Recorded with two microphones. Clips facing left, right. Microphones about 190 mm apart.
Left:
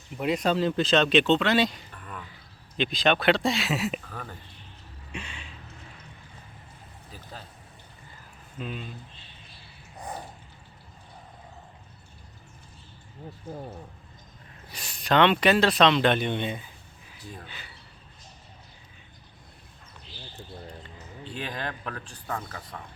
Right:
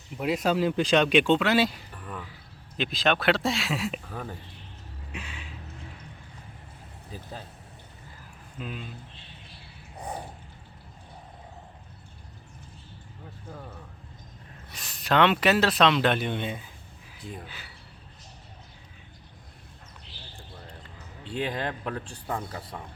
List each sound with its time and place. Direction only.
0.2 s speech: 5° right (ahead or behind)
4.1 s speech: 15° right (ahead or behind)
5.1 s a sound: 5° right (ahead or behind)
8.5 s speech: 5° right (ahead or behind)
10.0 s a sound: 10° right (ahead or behind)
13.5 s a man's voice: 30° left (ahead or behind)
14.7 s speech: centre (ahead or behind)
21.5 s speech: 25° right (ahead or behind)
22.3 s speech: 10° right (ahead or behind)